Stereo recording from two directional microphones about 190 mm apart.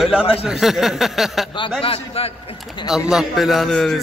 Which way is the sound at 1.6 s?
30° left (ahead or behind).